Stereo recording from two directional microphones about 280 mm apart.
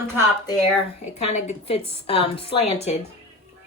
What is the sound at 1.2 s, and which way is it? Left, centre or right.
A woman's voice, left.